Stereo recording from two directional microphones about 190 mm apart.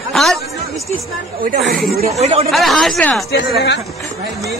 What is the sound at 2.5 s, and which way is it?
Speech, centre (ahead or behind).